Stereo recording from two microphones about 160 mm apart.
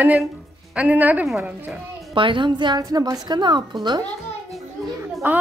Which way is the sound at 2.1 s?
30° right (ahead or behind).